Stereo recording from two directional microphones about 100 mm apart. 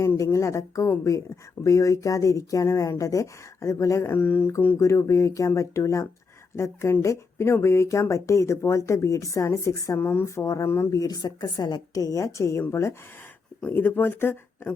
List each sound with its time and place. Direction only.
0.2 s speech: 30° left (ahead or behind)
4.8 s speech: 30° left (ahead or behind)
10.0 s speech: 20° left (ahead or behind)
10.9 s speech: 40° left (ahead or behind); by 14.7 s 20° left (ahead or behind)